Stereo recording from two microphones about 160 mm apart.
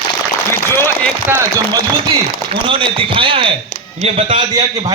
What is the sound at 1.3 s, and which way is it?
Speech, 20° right (ahead or behind).